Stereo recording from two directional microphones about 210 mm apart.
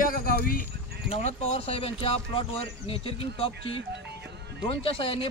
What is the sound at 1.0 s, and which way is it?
Speech, 30° left (ahead or behind).